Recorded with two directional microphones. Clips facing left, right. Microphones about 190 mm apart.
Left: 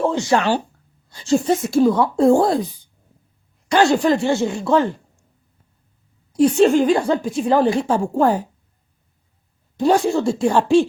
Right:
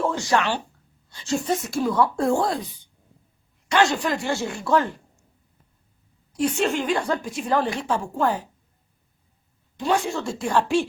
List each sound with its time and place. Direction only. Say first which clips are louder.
0.0 s a woman's voice: left 5 dB; 20° left (ahead or behind)
3.7 s speech: left 6 dB; 35° left (ahead or behind)
6.3 s a woman's voice: left 9 dB; 35° left (ahead or behind)
9.7 s a woman's voice: left 7 dB; 40° left (ahead or behind)